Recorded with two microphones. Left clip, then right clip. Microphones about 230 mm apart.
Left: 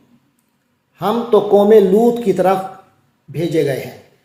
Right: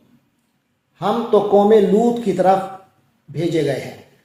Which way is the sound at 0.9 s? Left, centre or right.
Left.